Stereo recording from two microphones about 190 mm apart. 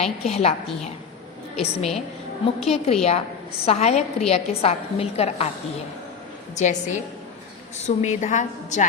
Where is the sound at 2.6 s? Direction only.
35° left (ahead or behind).